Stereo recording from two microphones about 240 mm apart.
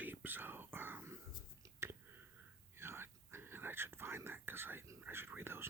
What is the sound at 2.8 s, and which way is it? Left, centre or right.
Whispering, centre.